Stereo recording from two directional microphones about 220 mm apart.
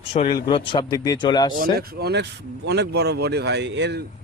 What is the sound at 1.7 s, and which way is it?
Speech, 45° right (ahead or behind).